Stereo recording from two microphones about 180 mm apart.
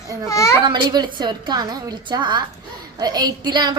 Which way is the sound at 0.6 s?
25° right (ahead or behind).